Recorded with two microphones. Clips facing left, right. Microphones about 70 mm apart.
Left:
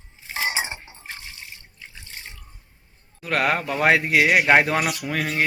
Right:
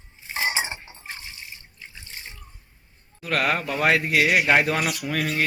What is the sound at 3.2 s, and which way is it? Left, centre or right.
Speech, left.